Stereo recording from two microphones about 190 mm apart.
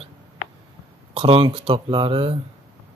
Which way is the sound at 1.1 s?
30° right (ahead or behind).